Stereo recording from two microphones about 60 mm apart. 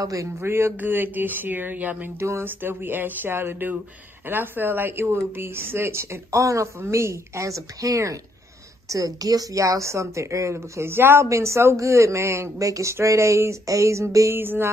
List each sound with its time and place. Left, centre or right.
0.0 s speech: right
0.4 s speech: right
2.1 s speech: right
11.2 s speech: right
12.9 s speech: right
14.3 s speech: right